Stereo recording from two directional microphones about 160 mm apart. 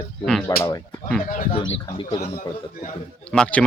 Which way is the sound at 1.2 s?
60° left (ahead or behind).